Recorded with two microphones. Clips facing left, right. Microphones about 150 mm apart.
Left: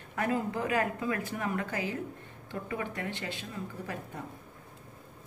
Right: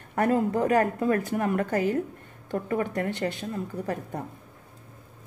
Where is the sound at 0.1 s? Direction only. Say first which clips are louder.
Right 7 dB; 45° right (ahead or behind).